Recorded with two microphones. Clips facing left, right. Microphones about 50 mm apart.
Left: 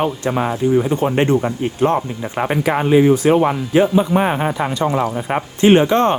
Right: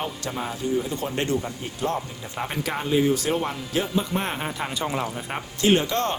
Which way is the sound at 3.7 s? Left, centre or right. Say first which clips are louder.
Left 10 dB; left.